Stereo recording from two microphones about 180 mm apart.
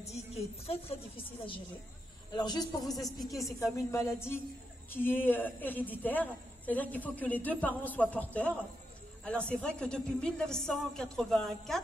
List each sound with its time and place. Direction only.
0.0 s speech: 35° left (ahead or behind)
2.3 s a man's voice: 20° left (ahead or behind)
3.0 s a woman's voice: centre (ahead or behind)
3.7 s a man's voice: 15° left (ahead or behind)